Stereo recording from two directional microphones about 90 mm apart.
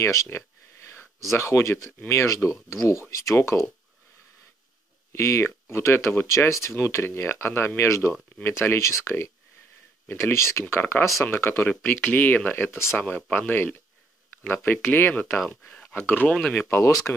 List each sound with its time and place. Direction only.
0.0 s speech: 35° left (ahead or behind)
5.1 s speech: 30° left (ahead or behind)
13.0 s speech: 15° left (ahead or behind)